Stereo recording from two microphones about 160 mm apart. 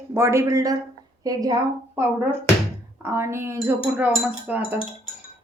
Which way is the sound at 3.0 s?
15° right (ahead or behind).